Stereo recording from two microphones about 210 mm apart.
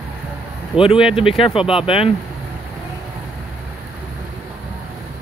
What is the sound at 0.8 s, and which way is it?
Speech, 25° left (ahead or behind).